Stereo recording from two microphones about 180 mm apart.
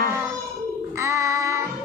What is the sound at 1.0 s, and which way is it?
Music, 15° right (ahead or behind).